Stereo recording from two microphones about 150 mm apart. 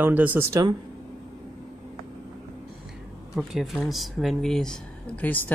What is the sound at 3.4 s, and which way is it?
Speech, centre (ahead or behind).